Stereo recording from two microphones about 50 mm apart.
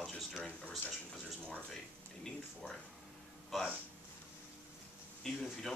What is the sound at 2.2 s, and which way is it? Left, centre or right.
Speech, centre.